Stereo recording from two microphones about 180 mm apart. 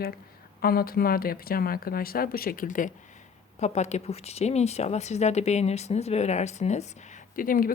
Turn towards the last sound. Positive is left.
turn(degrees=50)  # may be behind; listen again after turning